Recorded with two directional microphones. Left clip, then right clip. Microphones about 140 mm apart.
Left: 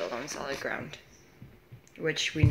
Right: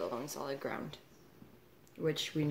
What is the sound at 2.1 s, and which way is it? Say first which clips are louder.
Speech: left 6 dB; 35° right (ahead or behind).